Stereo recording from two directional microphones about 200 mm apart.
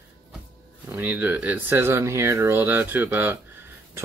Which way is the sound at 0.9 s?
10° right (ahead or behind).